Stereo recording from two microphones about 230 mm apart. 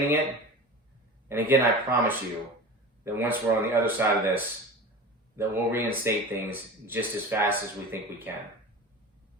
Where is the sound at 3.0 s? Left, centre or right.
Centre.